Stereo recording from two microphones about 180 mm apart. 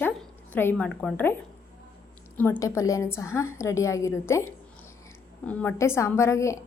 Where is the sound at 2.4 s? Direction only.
10° left (ahead or behind).